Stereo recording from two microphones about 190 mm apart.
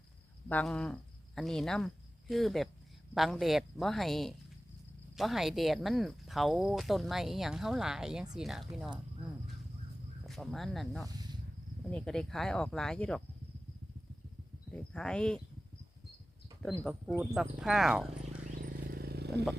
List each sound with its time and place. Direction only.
0.4 s speech: 5° left (ahead or behind)
10.2 s speech: centre (ahead or behind)
14.9 s speech: 5° left (ahead or behind)
17.1 s speech: centre (ahead or behind)
18.5 s a sound: 50° right (ahead or behind)